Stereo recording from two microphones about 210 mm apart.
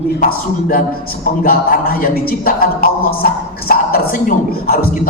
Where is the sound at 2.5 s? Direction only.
45° left (ahead or behind).